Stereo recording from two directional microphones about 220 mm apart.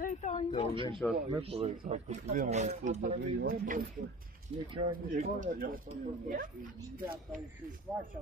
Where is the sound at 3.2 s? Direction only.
55° right (ahead or behind).